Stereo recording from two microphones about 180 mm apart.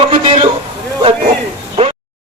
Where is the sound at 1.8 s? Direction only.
30° right (ahead or behind).